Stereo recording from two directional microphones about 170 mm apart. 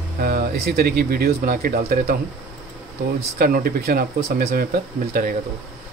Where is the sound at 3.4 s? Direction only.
60° right (ahead or behind).